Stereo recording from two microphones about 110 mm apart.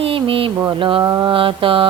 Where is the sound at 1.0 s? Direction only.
30° right (ahead or behind).